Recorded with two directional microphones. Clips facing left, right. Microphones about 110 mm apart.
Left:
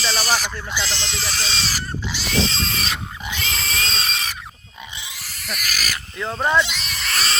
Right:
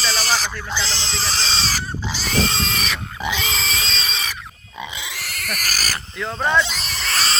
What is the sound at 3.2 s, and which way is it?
Pig, 90° right.